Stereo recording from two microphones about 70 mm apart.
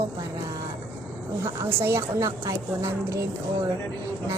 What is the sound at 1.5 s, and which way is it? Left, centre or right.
A woman's voice, right.